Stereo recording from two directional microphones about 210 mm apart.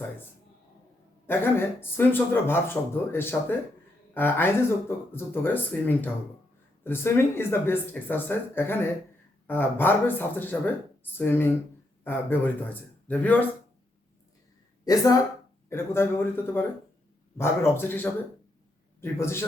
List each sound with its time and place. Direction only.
1.3 s speech: 10° left (ahead or behind)
14.8 s speech: 15° left (ahead or behind)